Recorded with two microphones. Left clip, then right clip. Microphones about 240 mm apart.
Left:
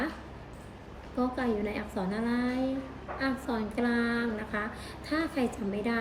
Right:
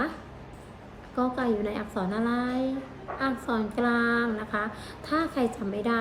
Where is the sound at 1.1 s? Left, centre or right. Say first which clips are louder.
Right 3 dB; centre.